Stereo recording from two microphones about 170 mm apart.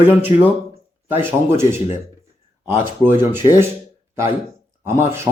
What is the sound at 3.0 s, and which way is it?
Speech, 15° right (ahead or behind).